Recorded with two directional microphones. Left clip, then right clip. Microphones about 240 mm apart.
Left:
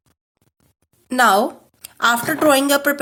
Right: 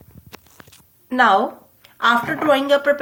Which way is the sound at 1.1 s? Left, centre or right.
Left.